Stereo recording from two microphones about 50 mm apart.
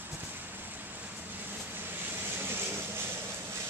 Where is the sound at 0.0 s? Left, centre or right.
Right.